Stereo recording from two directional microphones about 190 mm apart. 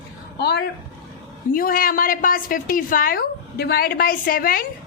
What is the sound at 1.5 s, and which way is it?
A woman's voice, 50° left (ahead or behind).